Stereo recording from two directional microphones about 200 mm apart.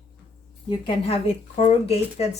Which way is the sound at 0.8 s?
30° left (ahead or behind).